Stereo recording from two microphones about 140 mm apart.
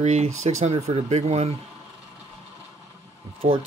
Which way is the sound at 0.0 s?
50° right (ahead or behind).